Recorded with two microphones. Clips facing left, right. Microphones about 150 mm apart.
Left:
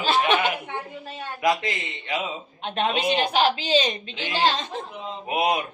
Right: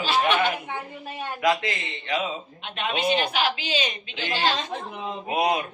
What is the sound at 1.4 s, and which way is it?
Speech, 15° left (ahead or behind).